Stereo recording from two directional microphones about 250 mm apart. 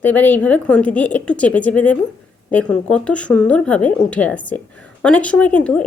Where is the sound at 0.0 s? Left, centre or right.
Centre.